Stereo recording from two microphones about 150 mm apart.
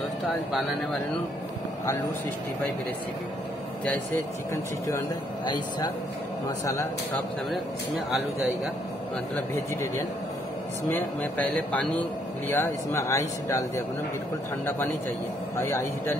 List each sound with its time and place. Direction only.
6.6 s speech: 20° left (ahead or behind)
9.3 s speech: 15° left (ahead or behind)
15.5 s speech: 15° left (ahead or behind)